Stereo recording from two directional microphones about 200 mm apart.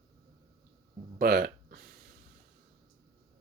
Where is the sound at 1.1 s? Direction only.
50° right (ahead or behind).